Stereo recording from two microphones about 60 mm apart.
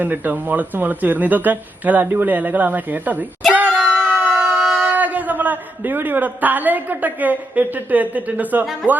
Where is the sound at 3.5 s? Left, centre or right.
Right.